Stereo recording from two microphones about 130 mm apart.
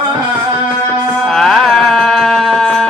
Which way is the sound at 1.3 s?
Centre (ahead or behind).